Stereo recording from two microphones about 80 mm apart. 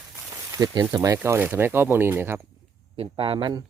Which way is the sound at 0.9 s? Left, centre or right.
Right.